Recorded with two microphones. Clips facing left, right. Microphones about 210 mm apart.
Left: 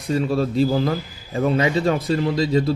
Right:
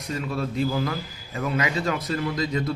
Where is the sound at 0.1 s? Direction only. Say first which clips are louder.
Left 8 dB; 30° left (ahead or behind).